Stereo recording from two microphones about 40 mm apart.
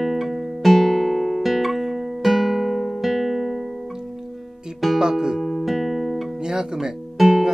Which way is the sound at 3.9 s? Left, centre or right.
Centre.